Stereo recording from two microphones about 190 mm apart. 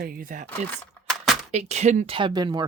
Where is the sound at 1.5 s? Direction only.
35° right (ahead or behind).